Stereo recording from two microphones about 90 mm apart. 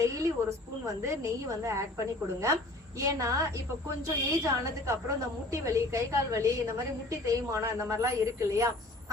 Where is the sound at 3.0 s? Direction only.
35° right (ahead or behind).